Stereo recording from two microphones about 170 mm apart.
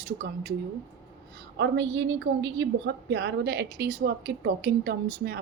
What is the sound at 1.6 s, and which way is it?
A woman's voice, 90° right.